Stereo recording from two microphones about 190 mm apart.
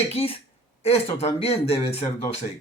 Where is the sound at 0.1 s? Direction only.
30° left (ahead or behind).